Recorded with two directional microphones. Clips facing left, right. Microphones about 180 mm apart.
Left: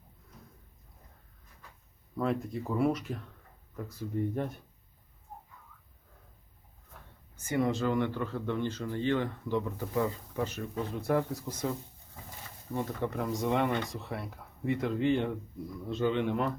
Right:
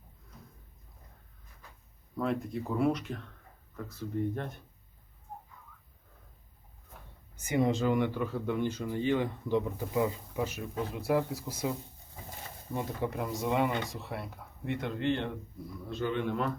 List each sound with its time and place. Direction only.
2.1 s speech: centre (ahead or behind)
7.3 s speech: 15° right (ahead or behind)
12.7 s speech: 10° right (ahead or behind)
15.9 s a man's voice: 20° left (ahead or behind)